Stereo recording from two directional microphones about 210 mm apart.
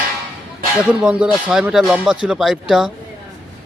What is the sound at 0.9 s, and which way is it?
Speech, 5° right (ahead or behind).